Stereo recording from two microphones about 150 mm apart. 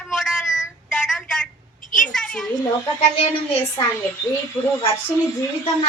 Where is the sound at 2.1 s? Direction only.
5° left (ahead or behind).